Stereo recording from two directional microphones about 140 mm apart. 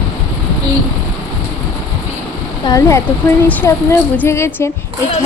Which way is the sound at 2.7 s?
20° left (ahead or behind).